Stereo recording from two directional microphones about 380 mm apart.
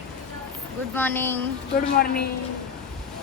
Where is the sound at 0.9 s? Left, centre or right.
Centre.